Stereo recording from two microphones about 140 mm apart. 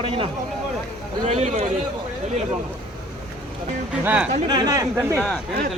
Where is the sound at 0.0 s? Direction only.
40° right (ahead or behind).